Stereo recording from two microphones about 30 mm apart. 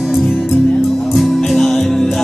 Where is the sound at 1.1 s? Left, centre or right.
Centre.